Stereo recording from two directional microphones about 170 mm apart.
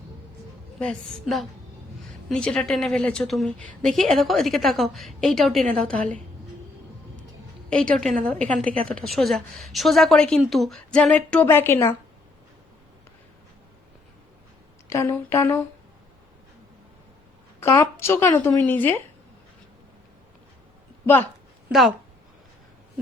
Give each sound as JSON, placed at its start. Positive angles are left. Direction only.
{"t": 0.8, "sound": "a woman's voice", "side_deg": 5}
{"t": 7.7, "sound": "a woman's voice", "side_deg": 5}
{"t": 14.8, "sound": "speech", "side_deg": 15}
{"t": 17.6, "sound": "speech", "side_deg": 15}
{"t": 21.7, "sound": "a woman's voice", "side_deg": 0}